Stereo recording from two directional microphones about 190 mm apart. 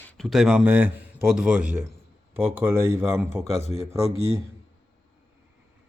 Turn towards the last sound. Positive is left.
turn(degrees=30)  # may be behind; listen again after turning